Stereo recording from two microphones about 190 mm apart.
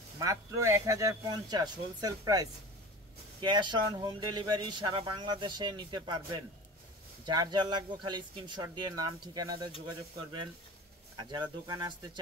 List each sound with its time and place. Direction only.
0.2 s speech: 15° right (ahead or behind)
11.1 s speech: 25° right (ahead or behind)